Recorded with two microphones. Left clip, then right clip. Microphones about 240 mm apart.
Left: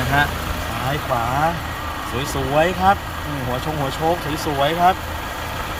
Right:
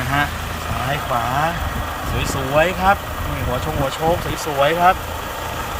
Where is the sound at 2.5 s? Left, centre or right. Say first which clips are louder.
Right 1 dB; centre.